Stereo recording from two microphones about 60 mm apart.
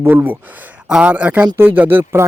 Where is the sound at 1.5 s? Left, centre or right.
Right.